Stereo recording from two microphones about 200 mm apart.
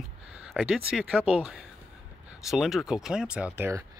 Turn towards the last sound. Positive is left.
turn(degrees=-10)  # may be behind; listen again after turning